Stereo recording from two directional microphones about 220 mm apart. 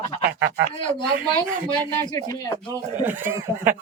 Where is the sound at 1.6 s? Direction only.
15° right (ahead or behind).